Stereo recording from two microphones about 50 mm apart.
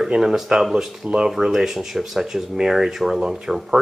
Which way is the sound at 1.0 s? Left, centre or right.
Centre.